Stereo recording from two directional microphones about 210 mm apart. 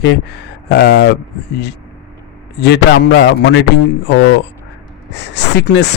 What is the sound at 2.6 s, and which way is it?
Speech, 55° left (ahead or behind).